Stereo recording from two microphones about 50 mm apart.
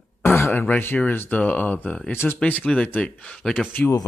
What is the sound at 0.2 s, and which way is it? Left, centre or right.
Throat clearing, left.